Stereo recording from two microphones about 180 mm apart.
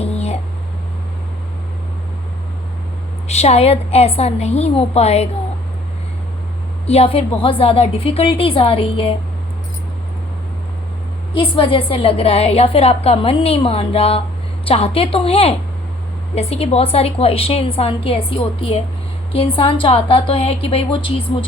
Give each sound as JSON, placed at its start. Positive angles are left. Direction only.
{"t": 0.0, "sound": "a sound", "side_deg": 35}
{"t": 3.2, "sound": "a woman's voice", "side_deg": 35}
{"t": 6.8, "sound": "a woman's voice", "side_deg": 35}
{"t": 11.3, "sound": "a woman's voice", "side_deg": 30}